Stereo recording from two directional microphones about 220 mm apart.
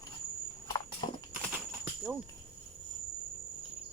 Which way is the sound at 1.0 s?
20° left (ahead or behind).